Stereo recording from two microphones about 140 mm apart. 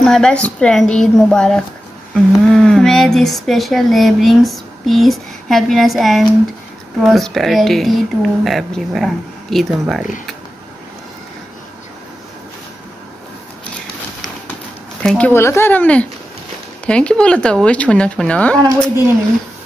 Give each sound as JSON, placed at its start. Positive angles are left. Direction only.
{"t": 0.0, "sound": "speech", "side_deg": 5}
{"t": 15.0, "sound": "speech", "side_deg": 10}